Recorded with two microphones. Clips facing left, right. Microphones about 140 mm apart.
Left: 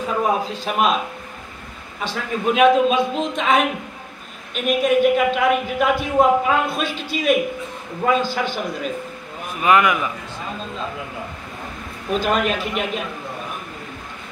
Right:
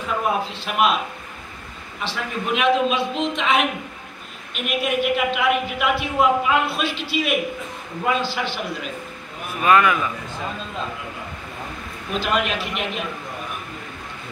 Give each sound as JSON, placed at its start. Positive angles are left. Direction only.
{"t": 0.0, "sound": "a man's voice", "side_deg": 40}
{"t": 2.0, "sound": "speech", "side_deg": 45}
{"t": 4.6, "sound": "speech", "side_deg": 40}
{"t": 9.6, "sound": "speech", "side_deg": 20}
{"t": 12.1, "sound": "speech", "side_deg": 40}